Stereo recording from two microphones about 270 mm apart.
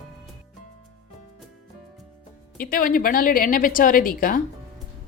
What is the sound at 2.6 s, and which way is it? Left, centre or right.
Speech, left.